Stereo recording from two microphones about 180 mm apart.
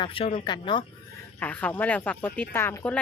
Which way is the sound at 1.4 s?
10° left (ahead or behind).